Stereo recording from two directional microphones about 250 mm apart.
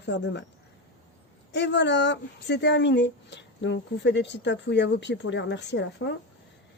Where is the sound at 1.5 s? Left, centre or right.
Left.